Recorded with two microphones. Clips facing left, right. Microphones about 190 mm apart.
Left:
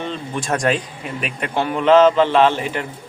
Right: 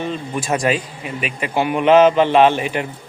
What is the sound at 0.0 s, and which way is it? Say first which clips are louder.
A man's voice: right 2 dB; 5° right (ahead or behind).